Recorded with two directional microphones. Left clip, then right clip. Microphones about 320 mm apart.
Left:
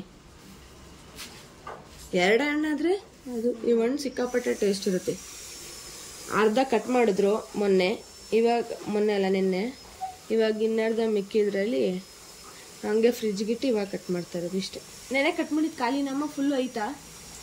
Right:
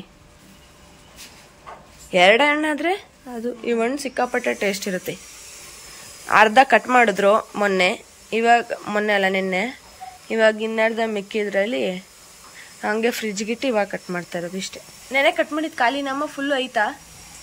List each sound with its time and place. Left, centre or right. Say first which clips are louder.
2.1 s speech: right 9 dB; centre
6.3 s speech: right 10 dB; centre